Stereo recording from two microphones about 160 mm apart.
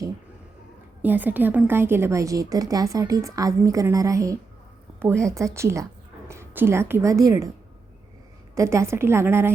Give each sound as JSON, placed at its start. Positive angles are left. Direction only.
{"t": 1.0, "sound": "a woman's voice", "side_deg": -10}
{"t": 8.5, "sound": "a woman's voice", "side_deg": -20}